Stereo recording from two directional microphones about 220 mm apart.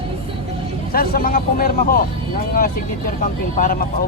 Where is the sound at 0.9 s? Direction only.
40° left (ahead or behind).